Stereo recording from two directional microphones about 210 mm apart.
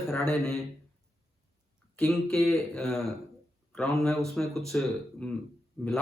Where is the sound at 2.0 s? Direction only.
5° left (ahead or behind).